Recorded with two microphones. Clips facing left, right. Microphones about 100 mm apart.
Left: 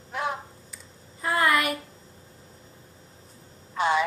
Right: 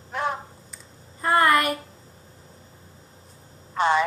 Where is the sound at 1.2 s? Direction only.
50° right (ahead or behind).